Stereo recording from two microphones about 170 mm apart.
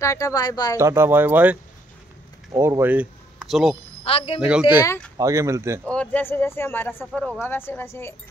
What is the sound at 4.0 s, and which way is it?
Speech, 35° left (ahead or behind).